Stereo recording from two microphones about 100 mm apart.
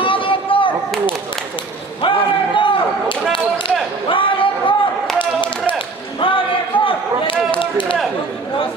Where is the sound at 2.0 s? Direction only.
55° left (ahead or behind).